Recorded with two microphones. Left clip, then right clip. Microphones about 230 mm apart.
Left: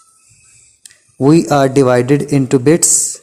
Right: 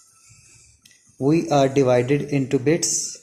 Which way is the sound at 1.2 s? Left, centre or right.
Left.